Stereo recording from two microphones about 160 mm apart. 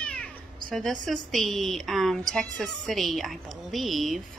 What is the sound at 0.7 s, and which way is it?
Speech, 5° left (ahead or behind).